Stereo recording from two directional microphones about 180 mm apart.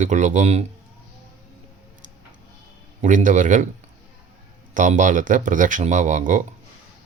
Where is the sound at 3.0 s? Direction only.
45° right (ahead or behind).